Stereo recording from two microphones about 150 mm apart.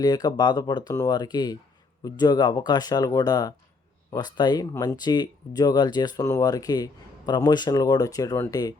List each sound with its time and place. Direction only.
0.0 s speech: 25° left (ahead or behind)